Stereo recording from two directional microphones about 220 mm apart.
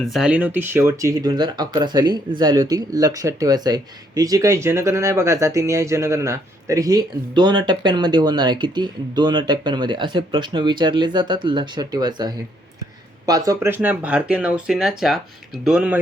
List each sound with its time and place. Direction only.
0.0 s speech: centre (ahead or behind)